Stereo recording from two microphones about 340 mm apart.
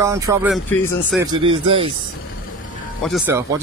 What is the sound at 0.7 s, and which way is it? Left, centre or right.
Speech, centre.